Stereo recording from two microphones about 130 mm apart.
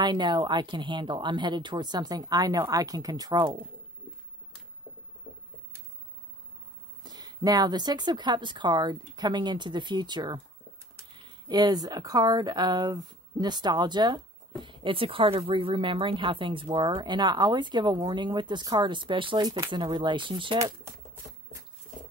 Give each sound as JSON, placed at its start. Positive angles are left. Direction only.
{"t": 0.0, "sound": "speech", "side_deg": -35}
{"t": 5.3, "sound": "a sound", "side_deg": 50}
{"t": 7.0, "sound": "speech", "side_deg": -35}